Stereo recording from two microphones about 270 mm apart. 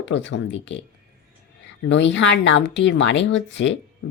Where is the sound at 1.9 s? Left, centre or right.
Left.